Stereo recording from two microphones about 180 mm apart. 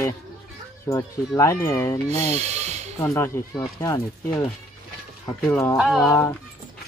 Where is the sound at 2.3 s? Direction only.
40° right (ahead or behind).